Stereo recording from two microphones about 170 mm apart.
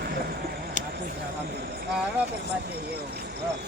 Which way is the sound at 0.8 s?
45° left (ahead or behind).